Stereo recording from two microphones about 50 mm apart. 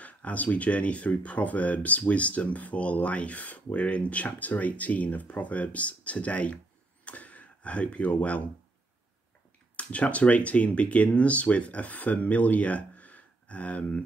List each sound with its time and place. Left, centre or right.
0.0 s speech: left
9.8 s speech: left